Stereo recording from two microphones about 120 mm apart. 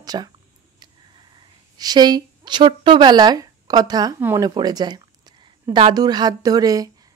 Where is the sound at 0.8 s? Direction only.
35° right (ahead or behind).